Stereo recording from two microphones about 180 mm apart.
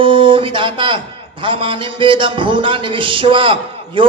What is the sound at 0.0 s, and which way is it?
A man's voice, 30° right (ahead or behind).